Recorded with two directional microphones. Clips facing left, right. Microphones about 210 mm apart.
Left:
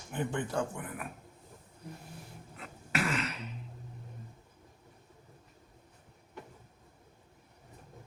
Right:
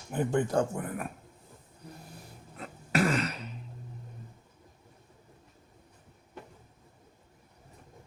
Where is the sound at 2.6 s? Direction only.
40° right (ahead or behind).